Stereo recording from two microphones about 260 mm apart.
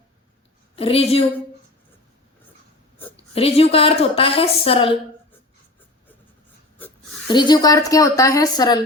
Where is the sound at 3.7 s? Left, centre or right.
Left.